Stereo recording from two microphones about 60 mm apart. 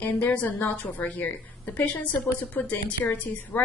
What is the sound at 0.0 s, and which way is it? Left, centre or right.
A woman's voice, left.